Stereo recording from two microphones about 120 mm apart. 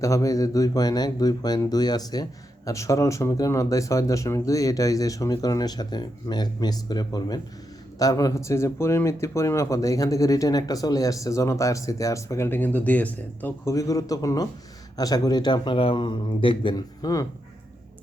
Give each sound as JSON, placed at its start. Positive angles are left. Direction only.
{"t": 0.0, "sound": "a man's voice", "side_deg": 25}
{"t": 13.7, "sound": "a man's voice", "side_deg": 30}